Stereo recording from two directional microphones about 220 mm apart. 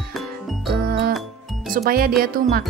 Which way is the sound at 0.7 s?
45° right (ahead or behind).